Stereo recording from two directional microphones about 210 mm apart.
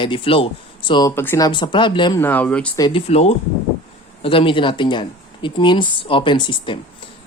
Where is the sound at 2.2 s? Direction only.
10° left (ahead or behind).